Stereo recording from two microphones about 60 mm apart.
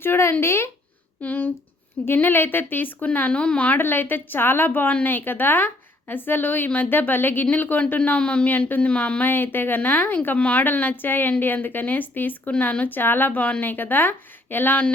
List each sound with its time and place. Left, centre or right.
0.0 s speech: left
1.2 s a woman's voice: left
3.8 s a woman's voice: left
9.2 s a woman's voice: left